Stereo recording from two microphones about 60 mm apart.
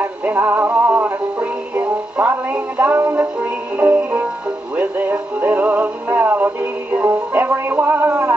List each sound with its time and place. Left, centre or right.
0.0 s music: right